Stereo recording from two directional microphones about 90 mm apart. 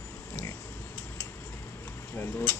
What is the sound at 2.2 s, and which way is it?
Speech, 25° left (ahead or behind).